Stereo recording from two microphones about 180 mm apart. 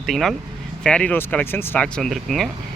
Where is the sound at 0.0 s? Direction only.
Centre (ahead or behind).